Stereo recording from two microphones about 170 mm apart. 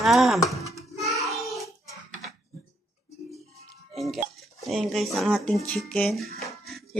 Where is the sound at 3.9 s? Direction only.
Centre (ahead or behind).